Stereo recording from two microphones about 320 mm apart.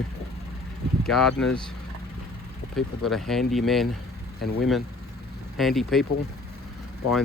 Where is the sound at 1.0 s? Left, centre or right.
Centre.